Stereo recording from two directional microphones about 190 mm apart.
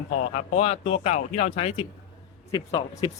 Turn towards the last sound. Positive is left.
turn(degrees=25)  # may be behind; listen again after turning